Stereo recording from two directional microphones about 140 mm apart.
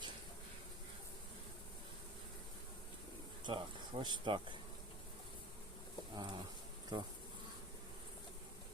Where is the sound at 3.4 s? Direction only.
35° right (ahead or behind).